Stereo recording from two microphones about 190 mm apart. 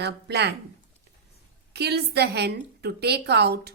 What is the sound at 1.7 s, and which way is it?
A woman's voice, 60° right (ahead or behind).